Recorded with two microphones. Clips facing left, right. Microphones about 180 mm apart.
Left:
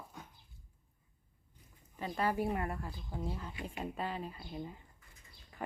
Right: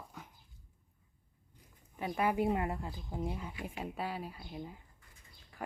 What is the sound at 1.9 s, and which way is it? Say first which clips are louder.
Speech: right 2 dB; 10° right (ahead or behind).